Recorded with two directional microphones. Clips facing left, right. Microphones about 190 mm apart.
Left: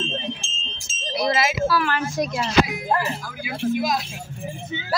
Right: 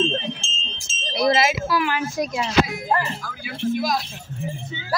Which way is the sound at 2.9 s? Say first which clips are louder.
Even; 5° left (ahead or behind).